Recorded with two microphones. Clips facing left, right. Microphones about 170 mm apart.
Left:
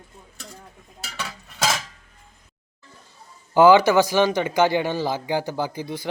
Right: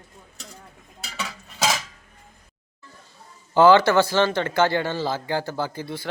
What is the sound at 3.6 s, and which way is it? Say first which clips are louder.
Speech: left 1 dB; 15° left (ahead or behind).